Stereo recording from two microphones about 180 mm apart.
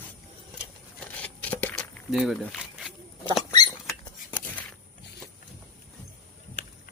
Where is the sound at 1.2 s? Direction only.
5° left (ahead or behind).